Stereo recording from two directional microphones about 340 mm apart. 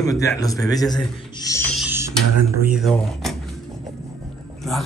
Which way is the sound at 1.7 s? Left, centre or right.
Centre.